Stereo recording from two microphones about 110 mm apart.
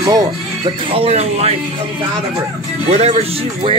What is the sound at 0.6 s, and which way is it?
Speech, 55° right (ahead or behind).